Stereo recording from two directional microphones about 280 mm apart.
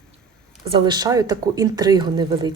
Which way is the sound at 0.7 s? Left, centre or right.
Centre.